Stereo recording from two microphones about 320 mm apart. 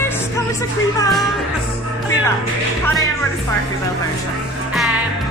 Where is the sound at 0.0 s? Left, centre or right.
Centre.